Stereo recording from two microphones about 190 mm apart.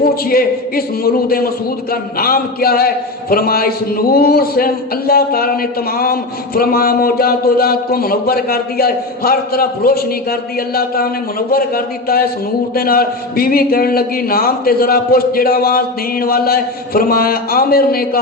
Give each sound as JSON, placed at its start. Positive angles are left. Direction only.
{"t": 0.0, "sound": "a man's voice", "side_deg": 50}